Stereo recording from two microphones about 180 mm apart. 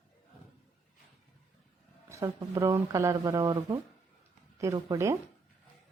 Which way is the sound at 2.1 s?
15° right (ahead or behind).